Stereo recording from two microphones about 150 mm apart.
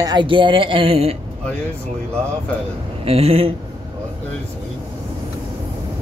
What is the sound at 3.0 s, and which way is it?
Speech, 40° right (ahead or behind).